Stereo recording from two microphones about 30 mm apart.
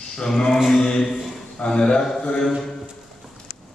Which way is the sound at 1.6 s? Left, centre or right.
Left.